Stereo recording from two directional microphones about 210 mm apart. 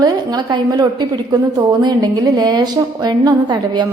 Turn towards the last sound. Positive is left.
turn(degrees=-20)  # may be behind; listen again after turning